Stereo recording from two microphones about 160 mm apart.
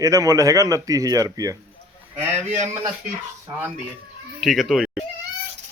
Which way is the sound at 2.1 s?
45° right (ahead or behind).